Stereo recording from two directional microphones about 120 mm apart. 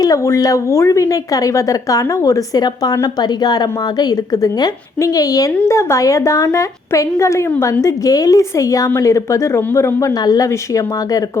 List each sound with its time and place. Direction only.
0.0 s a woman's voice: 25° left (ahead or behind)